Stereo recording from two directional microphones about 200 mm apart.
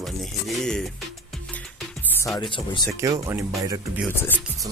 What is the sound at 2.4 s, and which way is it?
Speech, 25° left (ahead or behind).